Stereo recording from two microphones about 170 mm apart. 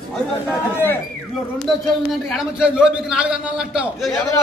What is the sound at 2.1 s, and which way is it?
A man's voice, centre (ahead or behind).